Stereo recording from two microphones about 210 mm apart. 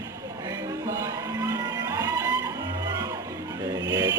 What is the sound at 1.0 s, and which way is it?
Music, 15° right (ahead or behind).